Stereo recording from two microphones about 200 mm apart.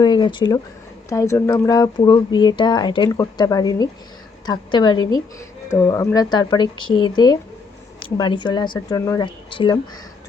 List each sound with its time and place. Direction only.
0.0 s speech: 20° left (ahead or behind)